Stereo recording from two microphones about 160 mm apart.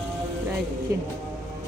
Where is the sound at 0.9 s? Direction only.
20° right (ahead or behind).